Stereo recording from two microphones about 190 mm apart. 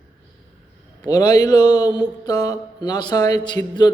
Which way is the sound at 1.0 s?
20° left (ahead or behind).